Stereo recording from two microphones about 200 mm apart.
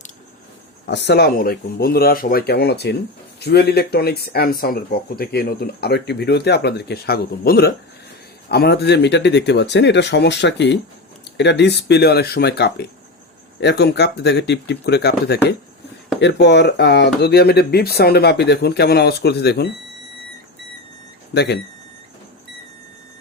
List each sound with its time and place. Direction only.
0.9 s speech: 60° left (ahead or behind)
21.3 s speech: 55° left (ahead or behind)